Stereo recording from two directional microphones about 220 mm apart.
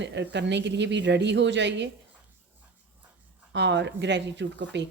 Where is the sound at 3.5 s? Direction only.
50° right (ahead or behind).